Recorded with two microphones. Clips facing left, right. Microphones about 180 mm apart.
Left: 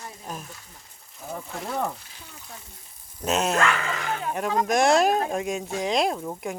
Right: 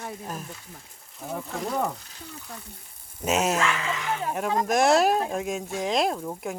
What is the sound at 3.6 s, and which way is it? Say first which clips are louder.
Speech: left 2 dB; 55° left (ahead or behind).